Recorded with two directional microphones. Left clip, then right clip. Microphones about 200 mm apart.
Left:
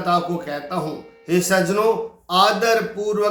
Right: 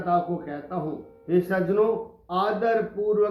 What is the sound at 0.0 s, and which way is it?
Speech, 20° left (ahead or behind).